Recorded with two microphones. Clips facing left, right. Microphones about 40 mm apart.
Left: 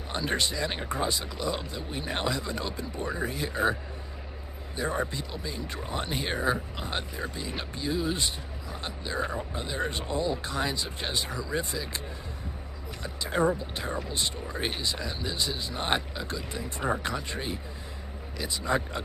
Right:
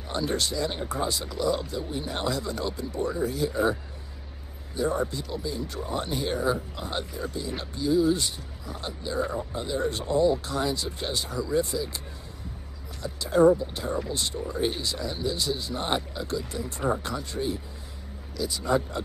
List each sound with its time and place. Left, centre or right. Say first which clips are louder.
0.1 s speech: right 1 dB; left
4.7 s speech: right 3 dB; left
11.7 s speech: right 5 dB; centre
13.0 s speech: right 7 dB; left
14.5 s speech: right 4 dB; left
14.8 s speech: right 2 dB; left